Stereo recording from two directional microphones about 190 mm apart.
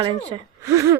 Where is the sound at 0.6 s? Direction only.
15° right (ahead or behind).